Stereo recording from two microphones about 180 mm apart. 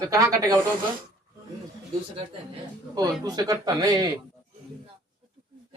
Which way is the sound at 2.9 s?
20° right (ahead or behind).